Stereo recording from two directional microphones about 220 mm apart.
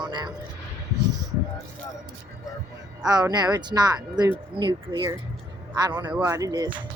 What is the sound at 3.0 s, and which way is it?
Speech, 15° right (ahead or behind).